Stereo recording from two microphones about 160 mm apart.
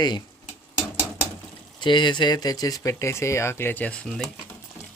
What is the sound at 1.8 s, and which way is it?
Speech, 30° left (ahead or behind).